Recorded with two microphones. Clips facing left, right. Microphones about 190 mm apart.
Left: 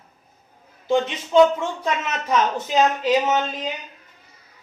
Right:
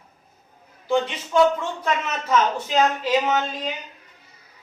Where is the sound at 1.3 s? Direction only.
25° left (ahead or behind).